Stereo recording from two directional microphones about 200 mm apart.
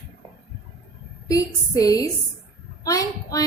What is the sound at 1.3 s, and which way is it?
A woman's voice, 15° left (ahead or behind).